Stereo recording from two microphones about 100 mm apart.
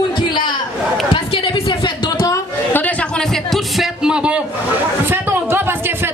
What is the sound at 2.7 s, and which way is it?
Chatter, 15° left (ahead or behind).